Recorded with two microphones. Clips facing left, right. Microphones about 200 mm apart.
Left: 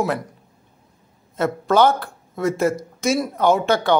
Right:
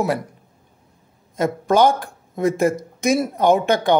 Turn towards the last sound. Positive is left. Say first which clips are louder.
# right 1 dB
turn(degrees=-15)  # may be behind; listen again after turning